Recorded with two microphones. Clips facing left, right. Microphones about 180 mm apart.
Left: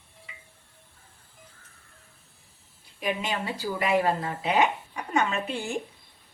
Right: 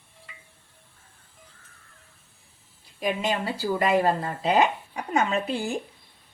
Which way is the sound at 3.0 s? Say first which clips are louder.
Right 3 dB; 40° right (ahead or behind).